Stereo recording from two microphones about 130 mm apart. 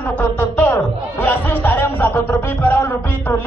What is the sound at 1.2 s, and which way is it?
Music, 15° left (ahead or behind).